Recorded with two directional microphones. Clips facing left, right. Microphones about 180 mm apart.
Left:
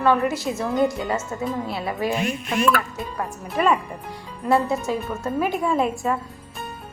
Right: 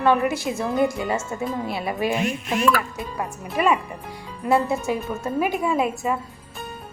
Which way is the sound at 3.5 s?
10° right (ahead or behind).